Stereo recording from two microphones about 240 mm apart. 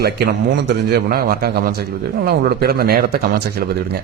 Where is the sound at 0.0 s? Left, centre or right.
Right.